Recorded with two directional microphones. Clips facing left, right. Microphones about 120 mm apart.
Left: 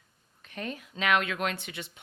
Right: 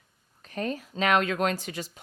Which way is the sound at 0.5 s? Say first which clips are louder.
Right 6 dB; 35° right (ahead or behind).